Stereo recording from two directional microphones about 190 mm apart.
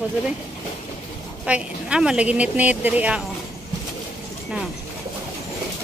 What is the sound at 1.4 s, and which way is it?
A woman's voice, 5° right (ahead or behind).